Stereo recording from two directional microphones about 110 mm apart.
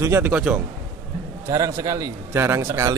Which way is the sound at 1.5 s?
30° right (ahead or behind).